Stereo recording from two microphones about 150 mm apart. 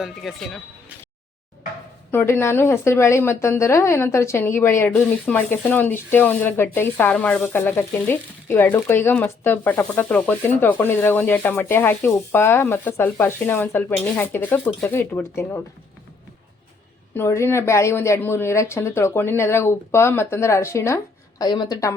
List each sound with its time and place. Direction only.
0.0 s speech: centre (ahead or behind)
2.0 s speech: 15° left (ahead or behind)
17.2 s speech: 15° left (ahead or behind)